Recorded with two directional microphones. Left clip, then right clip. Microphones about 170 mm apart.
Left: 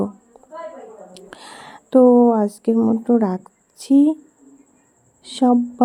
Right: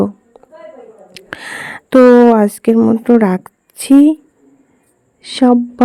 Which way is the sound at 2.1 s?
60° right (ahead or behind).